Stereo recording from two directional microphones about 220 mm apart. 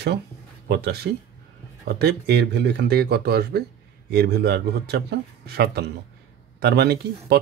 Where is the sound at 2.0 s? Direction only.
45° right (ahead or behind).